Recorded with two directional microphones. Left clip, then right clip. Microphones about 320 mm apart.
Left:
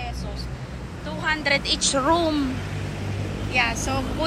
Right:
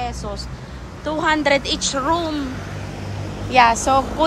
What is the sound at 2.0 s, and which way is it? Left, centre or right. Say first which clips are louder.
Speech: even; centre.